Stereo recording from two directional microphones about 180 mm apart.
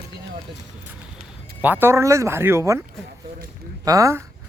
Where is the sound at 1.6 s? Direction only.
10° right (ahead or behind).